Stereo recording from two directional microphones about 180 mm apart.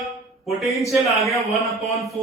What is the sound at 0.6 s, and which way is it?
A man's voice, centre (ahead or behind).